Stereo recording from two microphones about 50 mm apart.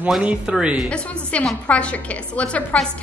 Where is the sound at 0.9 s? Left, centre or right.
Left.